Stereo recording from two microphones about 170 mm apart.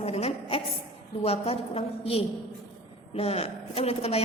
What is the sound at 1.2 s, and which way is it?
A woman's voice, 35° left (ahead or behind).